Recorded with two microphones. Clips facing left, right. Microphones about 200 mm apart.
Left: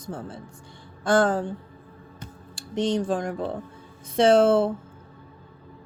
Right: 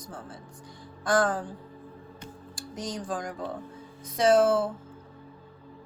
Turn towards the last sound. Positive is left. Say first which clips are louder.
# left 4 dB
turn(degrees=25)  # may be behind; listen again after turning